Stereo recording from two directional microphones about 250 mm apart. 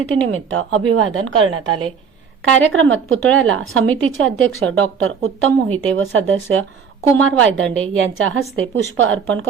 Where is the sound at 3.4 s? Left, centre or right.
Right.